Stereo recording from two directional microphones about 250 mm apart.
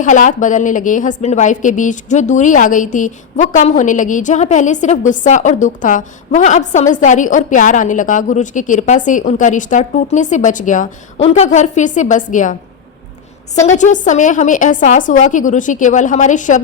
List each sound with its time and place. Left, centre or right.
0.0 s a woman's voice: left
13.6 s a woman's voice: left